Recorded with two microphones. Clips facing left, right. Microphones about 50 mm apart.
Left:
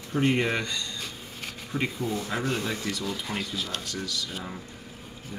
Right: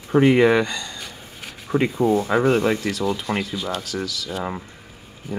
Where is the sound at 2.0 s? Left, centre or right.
Right.